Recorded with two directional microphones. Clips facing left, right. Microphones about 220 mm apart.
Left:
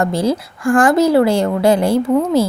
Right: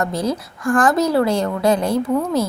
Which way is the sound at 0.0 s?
30° left (ahead or behind).